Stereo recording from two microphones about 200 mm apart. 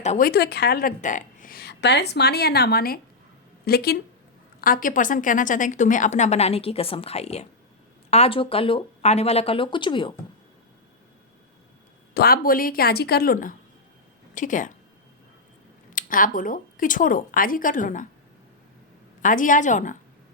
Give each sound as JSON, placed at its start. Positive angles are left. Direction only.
{"t": 0.0, "sound": "a woman's voice", "side_deg": 35}
{"t": 0.3, "sound": "a woman's voice", "side_deg": 55}
{"t": 12.1, "sound": "a woman's voice", "side_deg": 50}
{"t": 15.9, "sound": "a woman's voice", "side_deg": 40}
{"t": 19.2, "sound": "a woman's voice", "side_deg": 40}